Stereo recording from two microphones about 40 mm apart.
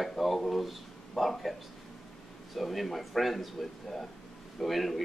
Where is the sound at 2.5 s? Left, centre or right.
Centre.